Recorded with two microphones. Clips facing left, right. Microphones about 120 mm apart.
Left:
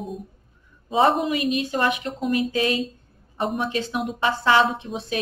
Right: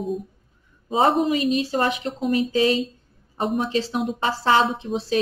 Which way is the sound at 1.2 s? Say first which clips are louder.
Right 2 dB; 35° right (ahead or behind).